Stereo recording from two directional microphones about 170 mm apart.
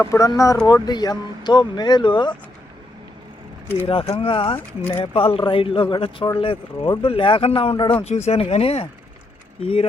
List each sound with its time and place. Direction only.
0.0 s speech: 20° left (ahead or behind)
3.8 s speech: 30° left (ahead or behind)
4.5 s speech: 10° left (ahead or behind)
4.9 s speech: 35° left (ahead or behind)